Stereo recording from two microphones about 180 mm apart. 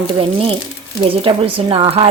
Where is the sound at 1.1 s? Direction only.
30° right (ahead or behind).